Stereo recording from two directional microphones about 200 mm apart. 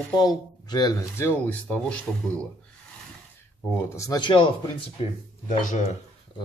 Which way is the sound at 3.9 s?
20° left (ahead or behind).